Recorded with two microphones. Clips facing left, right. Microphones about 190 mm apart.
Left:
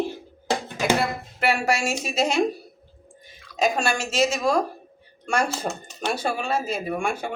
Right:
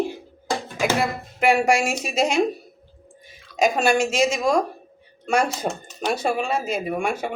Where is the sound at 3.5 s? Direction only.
10° right (ahead or behind).